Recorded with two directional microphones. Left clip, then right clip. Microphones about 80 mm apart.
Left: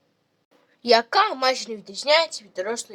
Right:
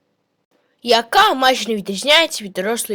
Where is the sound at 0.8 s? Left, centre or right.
Right.